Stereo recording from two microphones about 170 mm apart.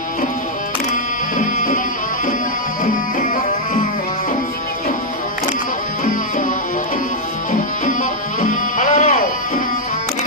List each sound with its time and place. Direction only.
1.4 s music: 50° left (ahead or behind)
2.8 s music: 50° left (ahead or behind)
8.4 s music: 50° left (ahead or behind)